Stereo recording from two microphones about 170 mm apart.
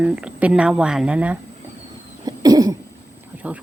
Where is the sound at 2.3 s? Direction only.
20° right (ahead or behind).